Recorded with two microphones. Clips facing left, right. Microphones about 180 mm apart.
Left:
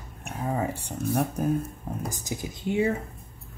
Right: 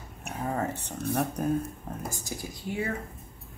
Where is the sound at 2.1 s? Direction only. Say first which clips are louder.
Left 3 dB; 20° left (ahead or behind).